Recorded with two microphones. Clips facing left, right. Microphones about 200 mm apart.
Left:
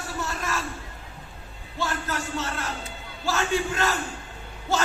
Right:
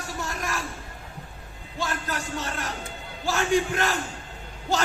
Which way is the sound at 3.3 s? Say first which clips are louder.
Right 2 dB; 15° right (ahead or behind).